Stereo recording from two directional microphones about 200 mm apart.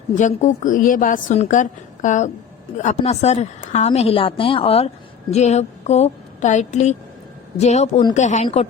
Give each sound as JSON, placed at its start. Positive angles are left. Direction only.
{"t": 0.2, "sound": "a woman's voice", "side_deg": 40}